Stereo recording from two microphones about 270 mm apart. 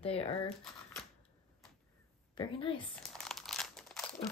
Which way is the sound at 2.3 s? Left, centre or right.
Centre.